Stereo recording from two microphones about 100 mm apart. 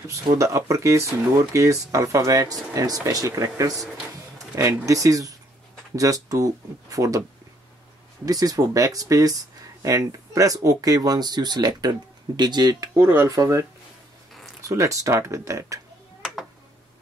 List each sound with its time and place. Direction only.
0.0 s speech: 30° right (ahead or behind)
8.3 s speech: 40° right (ahead or behind)
14.7 s speech: 35° right (ahead or behind)